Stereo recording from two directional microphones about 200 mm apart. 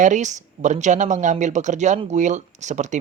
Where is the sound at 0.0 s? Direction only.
35° right (ahead or behind).